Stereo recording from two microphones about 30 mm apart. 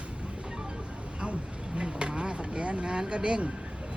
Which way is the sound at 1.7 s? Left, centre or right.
Right.